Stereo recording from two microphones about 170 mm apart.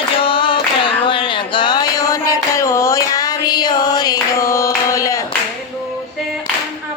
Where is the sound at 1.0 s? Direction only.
30° left (ahead or behind).